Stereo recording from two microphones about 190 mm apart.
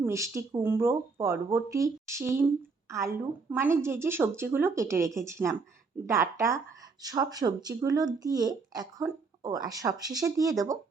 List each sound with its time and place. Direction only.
0.0 s speech: 15° right (ahead or behind)